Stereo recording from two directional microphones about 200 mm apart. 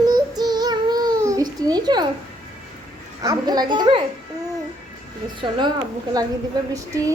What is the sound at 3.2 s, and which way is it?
Speech, 20° right (ahead or behind).